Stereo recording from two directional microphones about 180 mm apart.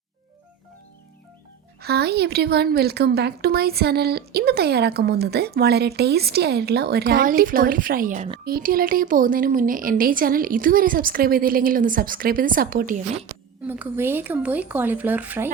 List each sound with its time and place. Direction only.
1.8 s a woman's voice: 65° right (ahead or behind)
13.7 s speech: 10° right (ahead or behind)